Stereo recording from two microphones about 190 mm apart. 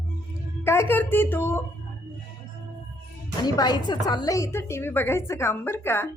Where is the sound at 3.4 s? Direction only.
20° left (ahead or behind).